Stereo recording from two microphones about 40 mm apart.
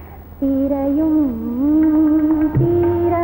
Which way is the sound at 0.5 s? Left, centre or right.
Left.